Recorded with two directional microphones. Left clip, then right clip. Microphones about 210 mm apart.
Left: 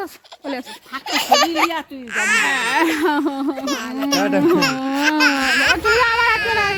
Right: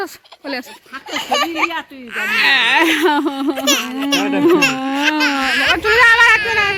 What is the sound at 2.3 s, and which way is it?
Speech, 15° left (ahead or behind).